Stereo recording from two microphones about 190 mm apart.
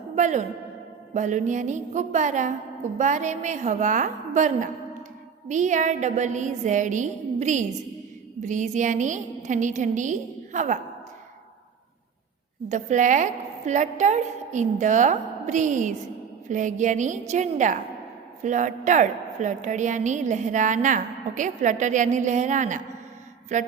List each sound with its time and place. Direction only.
0.2 s a woman's voice: 40° right (ahead or behind)
12.6 s a woman's voice: 40° right (ahead or behind)